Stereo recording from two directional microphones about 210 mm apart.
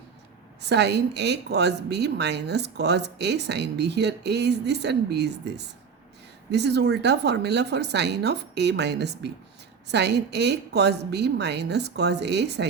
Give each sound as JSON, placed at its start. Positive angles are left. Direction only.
{"t": 0.6, "sound": "a woman's voice", "side_deg": -55}